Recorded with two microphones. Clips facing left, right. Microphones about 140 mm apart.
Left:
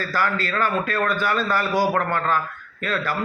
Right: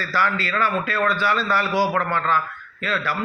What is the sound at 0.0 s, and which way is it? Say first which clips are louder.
A man's voice: even; 45° left (ahead or behind).